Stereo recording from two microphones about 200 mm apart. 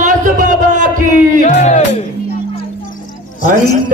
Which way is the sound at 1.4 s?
35° left (ahead or behind).